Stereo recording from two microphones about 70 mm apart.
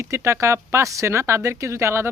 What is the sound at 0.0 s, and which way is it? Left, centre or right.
Speech, right.